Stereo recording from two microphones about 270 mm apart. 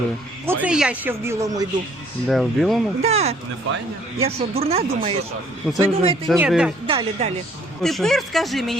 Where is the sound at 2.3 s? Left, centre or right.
Centre.